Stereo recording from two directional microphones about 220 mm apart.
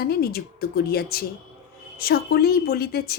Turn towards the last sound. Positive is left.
turn(degrees=45)  # may be behind; listen again after turning